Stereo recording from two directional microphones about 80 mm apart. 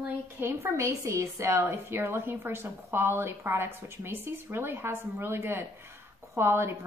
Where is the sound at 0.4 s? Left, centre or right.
Right.